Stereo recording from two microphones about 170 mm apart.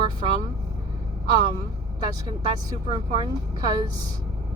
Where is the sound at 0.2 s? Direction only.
35° right (ahead or behind).